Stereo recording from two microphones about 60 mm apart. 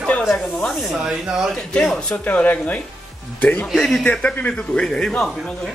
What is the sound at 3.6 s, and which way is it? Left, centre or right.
Speech, centre.